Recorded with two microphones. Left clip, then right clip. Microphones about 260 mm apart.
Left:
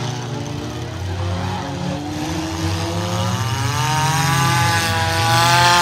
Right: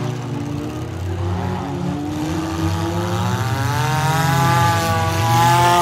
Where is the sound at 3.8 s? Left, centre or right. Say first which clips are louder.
Left 2 dB; centre.